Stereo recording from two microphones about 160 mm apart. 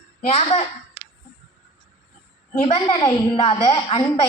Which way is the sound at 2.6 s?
35° left (ahead or behind).